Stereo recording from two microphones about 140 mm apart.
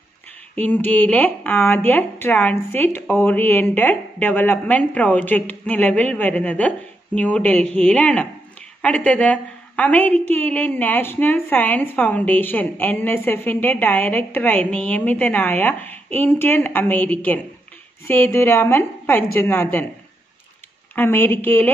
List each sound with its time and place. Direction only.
0.6 s a woman's voice: 15° left (ahead or behind)
20.9 s a woman's voice: 15° left (ahead or behind)